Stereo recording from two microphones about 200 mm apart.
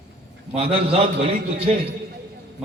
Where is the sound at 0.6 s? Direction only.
30° right (ahead or behind).